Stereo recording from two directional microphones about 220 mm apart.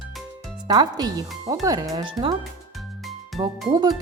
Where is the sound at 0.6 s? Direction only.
15° right (ahead or behind).